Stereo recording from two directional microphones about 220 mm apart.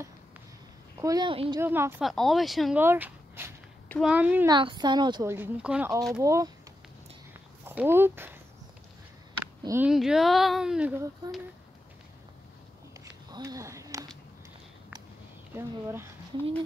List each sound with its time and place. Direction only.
1.0 s a woman's voice: 20° right (ahead or behind)
1.6 s speech: 10° right (ahead or behind)
4.5 s speech: 20° right (ahead or behind)
7.6 s speech: 10° right (ahead or behind)
9.6 s speech: 10° right (ahead or behind)
13.0 s a sound: 15° right (ahead or behind)
15.5 s speech: 10° right (ahead or behind)